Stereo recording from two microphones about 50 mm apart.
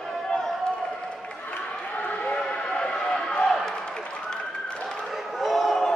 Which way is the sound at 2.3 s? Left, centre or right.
Centre.